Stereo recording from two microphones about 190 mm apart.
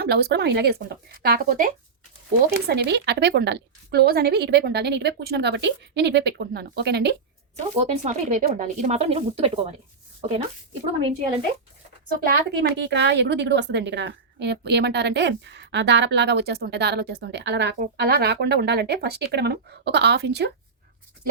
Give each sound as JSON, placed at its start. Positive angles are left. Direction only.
{"t": 0.0, "sound": "a woman's voice", "side_deg": -55}
{"t": 2.6, "sound": "a woman's voice", "side_deg": -60}
{"t": 7.8, "sound": "speech", "side_deg": -35}
{"t": 12.1, "sound": "a woman's voice", "side_deg": -65}